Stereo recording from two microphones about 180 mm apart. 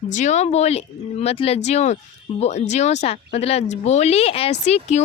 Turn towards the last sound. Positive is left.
turn(degrees=40)  # may be behind; listen again after turning